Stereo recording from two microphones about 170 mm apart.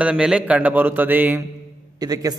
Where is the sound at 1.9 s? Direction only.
20° right (ahead or behind).